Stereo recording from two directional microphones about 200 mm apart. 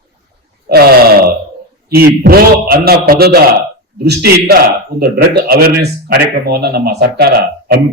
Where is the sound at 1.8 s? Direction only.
50° right (ahead or behind).